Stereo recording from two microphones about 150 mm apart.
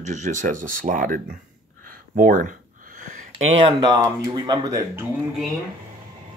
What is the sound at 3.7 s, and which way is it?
Speech, 30° right (ahead or behind).